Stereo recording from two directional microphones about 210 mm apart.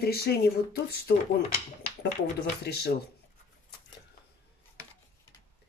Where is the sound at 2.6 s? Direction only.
50° left (ahead or behind).